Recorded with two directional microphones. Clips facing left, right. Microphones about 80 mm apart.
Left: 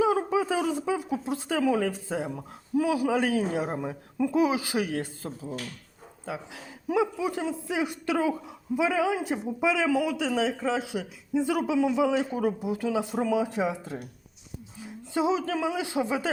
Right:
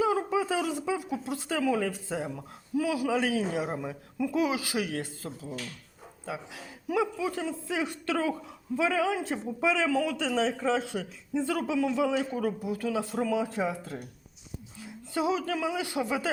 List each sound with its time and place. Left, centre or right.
0.0 s a sound: left
0.5 s speech: left
2.3 s speech: left
3.2 s a woman's voice: centre
6.8 s a woman's voice: left; by 11.0 s centre
11.3 s a woman's voice: centre